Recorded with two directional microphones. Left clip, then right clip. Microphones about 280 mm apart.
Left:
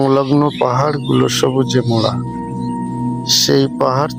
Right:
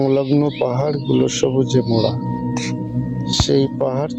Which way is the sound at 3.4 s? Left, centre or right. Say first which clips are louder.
Left 2 dB; centre.